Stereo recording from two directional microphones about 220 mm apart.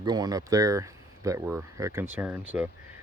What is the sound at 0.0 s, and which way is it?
Speech, 20° right (ahead or behind).